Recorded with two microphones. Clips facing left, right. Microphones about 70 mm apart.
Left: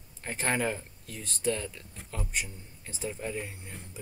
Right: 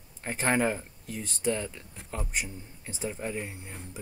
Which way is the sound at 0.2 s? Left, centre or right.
Centre.